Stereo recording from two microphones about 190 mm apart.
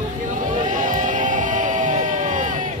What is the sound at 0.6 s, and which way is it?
Music, 45° right (ahead or behind).